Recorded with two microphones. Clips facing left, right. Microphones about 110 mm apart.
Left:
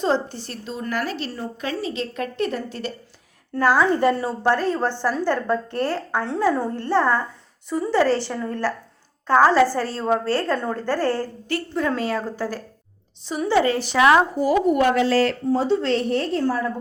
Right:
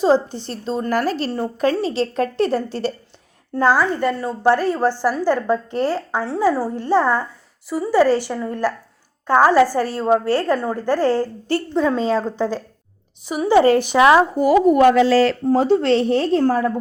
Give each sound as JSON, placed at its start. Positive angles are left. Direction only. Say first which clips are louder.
{"t": 0.0, "sound": "a woman's voice", "louder": "right 6 dB", "side_deg": -15}
{"t": 0.4, "sound": "a woman's voice", "louder": "right 7 dB", "side_deg": -30}
{"t": 1.7, "sound": "a woman's voice", "louder": "right 7 dB", "side_deg": -30}
{"t": 4.1, "sound": "a woman's voice", "louder": "even", "side_deg": 10}
{"t": 4.4, "sound": "a woman's voice", "louder": "right 5 dB", "side_deg": -10}
{"t": 11.4, "sound": "a woman's voice", "louder": "right 5 dB", "side_deg": -30}
{"t": 11.8, "sound": "a woman's voice", "louder": "right 5 dB", "side_deg": -20}
{"t": 13.9, "sound": "a woman's voice", "louder": "right 2 dB", "side_deg": -25}
{"t": 14.3, "sound": "a woman's voice", "louder": "right 5 dB", "side_deg": -70}
{"t": 15.4, "sound": "speech", "louder": "right 4 dB", "side_deg": -55}
{"t": 15.9, "sound": "a woman's voice", "louder": "right 5 dB", "side_deg": -90}